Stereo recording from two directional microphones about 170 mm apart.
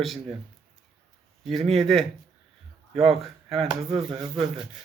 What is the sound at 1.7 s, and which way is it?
Speech, centre (ahead or behind).